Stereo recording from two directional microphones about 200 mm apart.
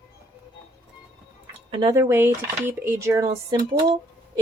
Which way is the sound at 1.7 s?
20° right (ahead or behind).